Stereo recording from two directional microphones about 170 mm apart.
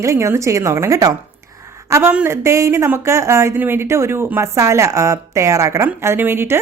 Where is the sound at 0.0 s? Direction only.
15° right (ahead or behind).